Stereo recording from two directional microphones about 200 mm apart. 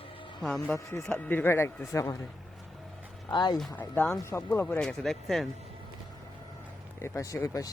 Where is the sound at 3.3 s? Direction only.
20° left (ahead or behind).